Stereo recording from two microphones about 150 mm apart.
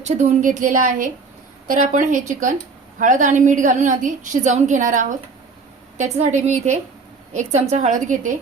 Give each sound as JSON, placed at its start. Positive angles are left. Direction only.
{"t": 0.0, "sound": "a woman's voice", "side_deg": -50}